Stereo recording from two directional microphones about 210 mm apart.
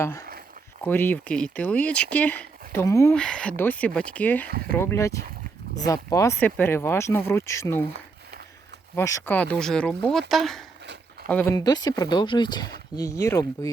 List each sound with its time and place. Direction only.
0.0 s speech: 15° left (ahead or behind)
3.1 s speech: 5° left (ahead or behind)
9.0 s speech: 10° left (ahead or behind)